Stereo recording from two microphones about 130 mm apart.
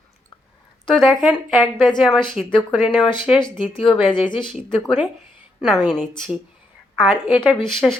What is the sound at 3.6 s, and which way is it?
Speech, 40° left (ahead or behind).